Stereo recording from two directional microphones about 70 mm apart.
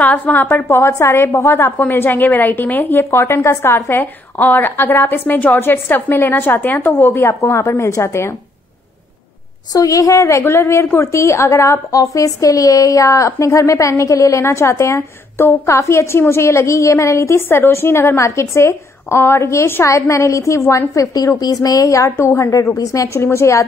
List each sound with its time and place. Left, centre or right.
0.0 s a woman's voice: left
1.8 s a woman's voice: left
9.7 s a woman's voice: left
20.9 s a woman's voice: left